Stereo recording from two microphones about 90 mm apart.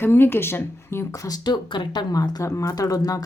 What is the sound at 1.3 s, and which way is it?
Speech, 55° left (ahead or behind).